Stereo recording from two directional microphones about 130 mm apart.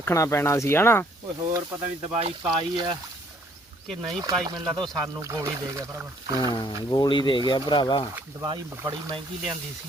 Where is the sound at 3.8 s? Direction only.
5° left (ahead or behind).